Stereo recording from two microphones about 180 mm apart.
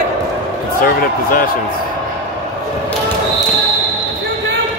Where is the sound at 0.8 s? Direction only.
55° left (ahead or behind).